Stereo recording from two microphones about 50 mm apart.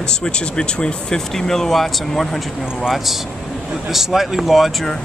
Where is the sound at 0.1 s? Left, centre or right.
Centre.